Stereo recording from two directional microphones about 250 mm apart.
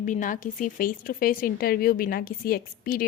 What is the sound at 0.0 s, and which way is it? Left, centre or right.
Speech, left.